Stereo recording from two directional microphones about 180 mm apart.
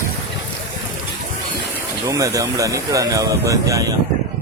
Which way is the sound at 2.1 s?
20° right (ahead or behind).